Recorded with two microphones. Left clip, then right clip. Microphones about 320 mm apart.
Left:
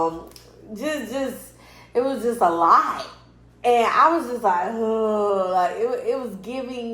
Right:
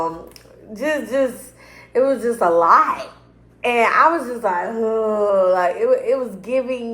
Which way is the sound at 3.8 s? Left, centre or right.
Centre.